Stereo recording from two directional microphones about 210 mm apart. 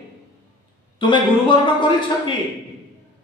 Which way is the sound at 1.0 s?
25° left (ahead or behind).